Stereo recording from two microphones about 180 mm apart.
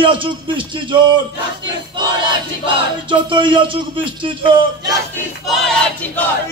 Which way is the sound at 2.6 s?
25° right (ahead or behind).